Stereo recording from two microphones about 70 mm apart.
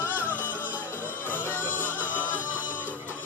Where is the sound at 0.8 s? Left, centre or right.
Left.